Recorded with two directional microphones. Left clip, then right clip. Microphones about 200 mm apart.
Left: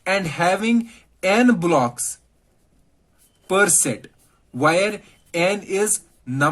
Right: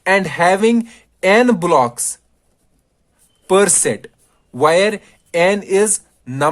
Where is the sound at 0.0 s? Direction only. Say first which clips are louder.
Right 6 dB; 50° right (ahead or behind).